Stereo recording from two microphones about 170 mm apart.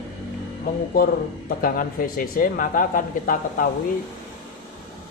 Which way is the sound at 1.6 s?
55° left (ahead or behind).